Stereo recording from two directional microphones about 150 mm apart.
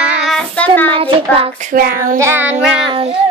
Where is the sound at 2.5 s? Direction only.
40° right (ahead or behind).